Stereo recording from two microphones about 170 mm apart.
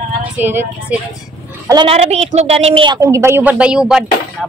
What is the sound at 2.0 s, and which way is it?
Speech, 40° right (ahead or behind).